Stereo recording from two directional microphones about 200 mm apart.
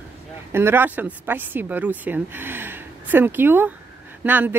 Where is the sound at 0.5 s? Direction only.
10° right (ahead or behind).